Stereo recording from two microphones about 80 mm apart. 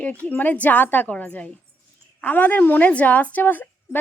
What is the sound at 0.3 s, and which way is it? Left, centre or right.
A woman's voice, left.